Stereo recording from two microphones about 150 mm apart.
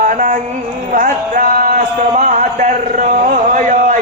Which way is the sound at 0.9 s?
65° right (ahead or behind).